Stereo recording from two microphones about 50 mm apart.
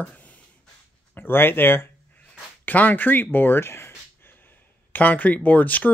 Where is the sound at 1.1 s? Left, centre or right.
Left.